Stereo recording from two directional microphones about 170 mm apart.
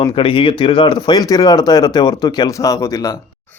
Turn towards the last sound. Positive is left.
turn(degrees=20)  # may be behind; listen again after turning